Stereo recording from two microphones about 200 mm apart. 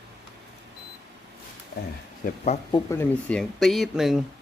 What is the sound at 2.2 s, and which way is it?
Speech, 35° left (ahead or behind).